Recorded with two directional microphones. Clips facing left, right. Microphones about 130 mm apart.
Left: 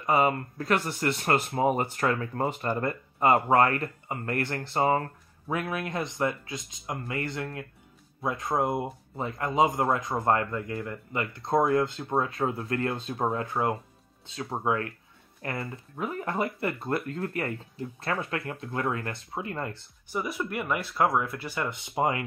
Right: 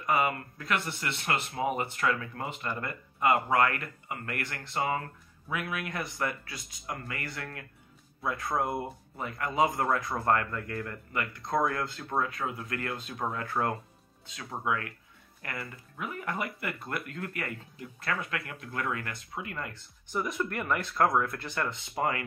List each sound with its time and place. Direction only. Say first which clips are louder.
0.0 s speech: left 4 dB; 30° left (ahead or behind)
14.2 s speech: left 5 dB; 30° left (ahead or behind)
20.1 s speech: left 1 dB; 10° left (ahead or behind)